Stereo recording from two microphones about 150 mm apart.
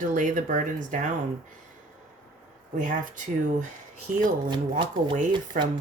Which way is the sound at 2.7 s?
60° right (ahead or behind).